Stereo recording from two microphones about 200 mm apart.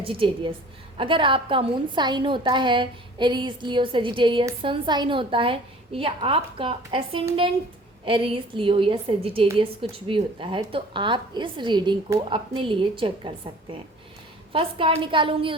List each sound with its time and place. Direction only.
0.0 s a woman's voice: 25° right (ahead or behind)